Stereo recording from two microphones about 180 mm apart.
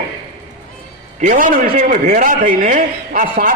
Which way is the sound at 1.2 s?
45° right (ahead or behind).